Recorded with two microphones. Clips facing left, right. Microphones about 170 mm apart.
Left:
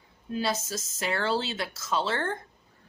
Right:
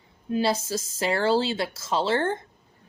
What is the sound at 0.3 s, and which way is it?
Speech, 30° right (ahead or behind).